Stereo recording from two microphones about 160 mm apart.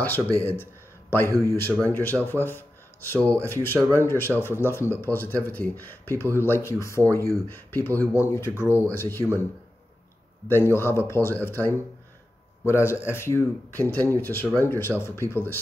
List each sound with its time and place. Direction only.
0.0 s speech: 10° left (ahead or behind)
10.5 s speech: 15° left (ahead or behind)